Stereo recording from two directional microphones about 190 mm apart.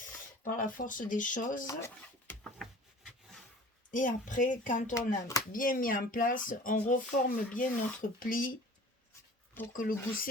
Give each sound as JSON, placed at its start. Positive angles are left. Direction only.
{"t": 0.4, "sound": "speech", "side_deg": 45}
{"t": 1.6, "sound": "speech", "side_deg": 15}
{"t": 2.4, "sound": "rub", "side_deg": 0}
{"t": 3.9, "sound": "speech", "side_deg": 45}
{"t": 9.7, "sound": "speech", "side_deg": 50}